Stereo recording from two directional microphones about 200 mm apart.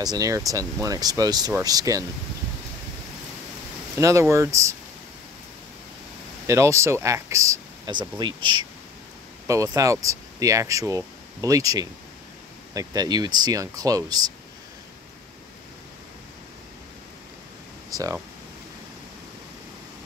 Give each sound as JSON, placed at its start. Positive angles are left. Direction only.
{"t": 0.0, "sound": "speech", "side_deg": -20}
{"t": 3.9, "sound": "speech", "side_deg": -15}
{"t": 6.4, "sound": "speech", "side_deg": -15}
{"t": 17.8, "sound": "a sound", "side_deg": -15}